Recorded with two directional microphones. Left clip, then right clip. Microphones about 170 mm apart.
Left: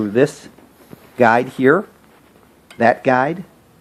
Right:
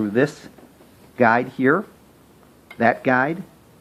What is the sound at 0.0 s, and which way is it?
Speech, 50° left (ahead or behind).